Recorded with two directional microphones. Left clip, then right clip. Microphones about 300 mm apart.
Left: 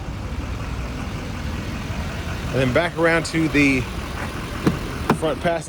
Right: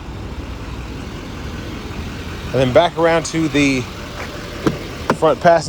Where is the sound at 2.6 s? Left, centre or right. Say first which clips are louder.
Right 6 dB; centre.